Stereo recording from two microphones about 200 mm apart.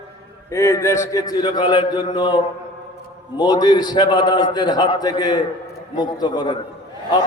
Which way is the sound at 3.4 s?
20° left (ahead or behind).